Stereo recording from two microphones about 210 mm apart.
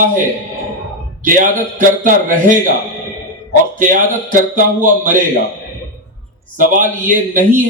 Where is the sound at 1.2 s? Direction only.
40° right (ahead or behind).